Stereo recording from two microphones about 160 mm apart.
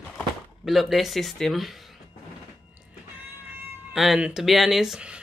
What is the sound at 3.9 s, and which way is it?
Speech, centre (ahead or behind).